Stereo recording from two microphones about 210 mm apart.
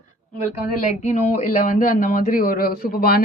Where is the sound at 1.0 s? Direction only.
35° left (ahead or behind).